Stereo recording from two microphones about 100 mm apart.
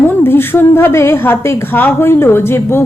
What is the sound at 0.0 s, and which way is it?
A woman's voice, 20° left (ahead or behind).